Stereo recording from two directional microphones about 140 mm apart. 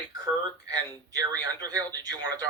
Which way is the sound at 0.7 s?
25° right (ahead or behind).